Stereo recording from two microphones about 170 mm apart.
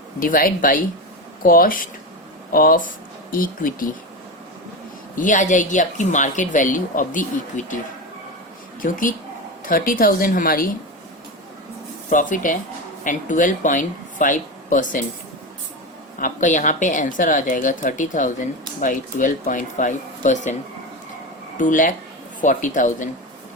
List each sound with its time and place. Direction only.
0.2 s a woman's voice: 55° left (ahead or behind)
5.1 s speech: 50° left (ahead or behind)
8.8 s a woman's voice: 50° left (ahead or behind)
12.1 s speech: 50° left (ahead or behind)
16.2 s speech: 50° left (ahead or behind)
21.6 s speech: 50° left (ahead or behind)